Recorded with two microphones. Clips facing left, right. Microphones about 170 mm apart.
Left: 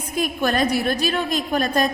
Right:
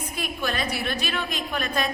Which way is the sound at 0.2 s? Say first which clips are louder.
Left 9 dB; 45° left (ahead or behind).